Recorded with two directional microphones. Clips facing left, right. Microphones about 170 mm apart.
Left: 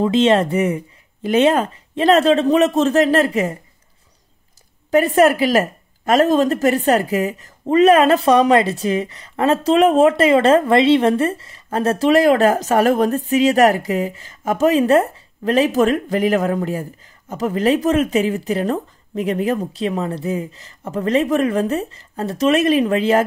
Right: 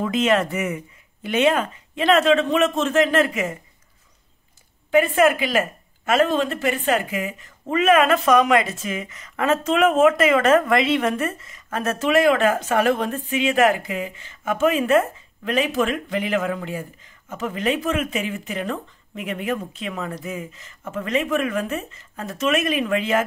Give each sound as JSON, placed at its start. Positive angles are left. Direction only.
{"t": 0.0, "sound": "speech", "side_deg": 30}
{"t": 4.9, "sound": "speech", "side_deg": 40}